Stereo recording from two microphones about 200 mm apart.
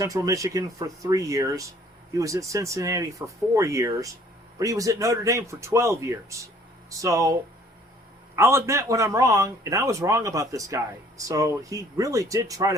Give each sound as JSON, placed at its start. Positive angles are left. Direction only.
{"t": 0.0, "sound": "speech", "side_deg": -15}
{"t": 8.4, "sound": "speech", "side_deg": -15}